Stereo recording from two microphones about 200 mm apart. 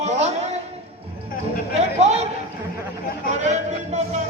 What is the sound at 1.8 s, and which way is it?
Speech, 35° right (ahead or behind).